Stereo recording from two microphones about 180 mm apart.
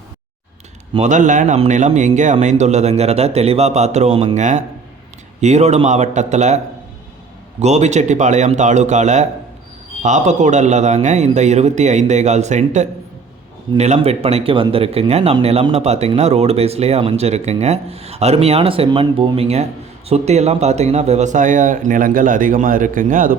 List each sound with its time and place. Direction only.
0.9 s speech: 40° right (ahead or behind)
7.6 s a man's voice: 40° right (ahead or behind)